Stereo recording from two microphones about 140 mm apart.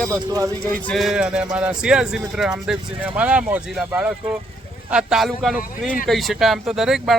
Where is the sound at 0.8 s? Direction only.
Centre (ahead or behind).